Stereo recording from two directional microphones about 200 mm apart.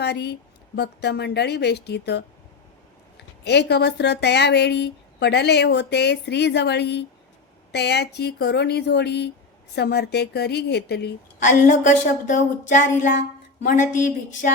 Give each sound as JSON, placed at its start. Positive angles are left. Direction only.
{"t": 0.0, "sound": "speech", "side_deg": 55}
{"t": 11.4, "sound": "speech", "side_deg": 40}